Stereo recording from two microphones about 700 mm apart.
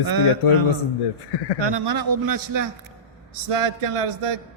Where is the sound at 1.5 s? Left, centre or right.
Right.